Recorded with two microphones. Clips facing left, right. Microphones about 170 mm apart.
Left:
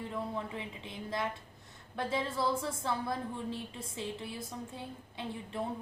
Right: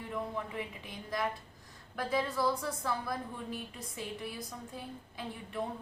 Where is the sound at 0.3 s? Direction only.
25° left (ahead or behind).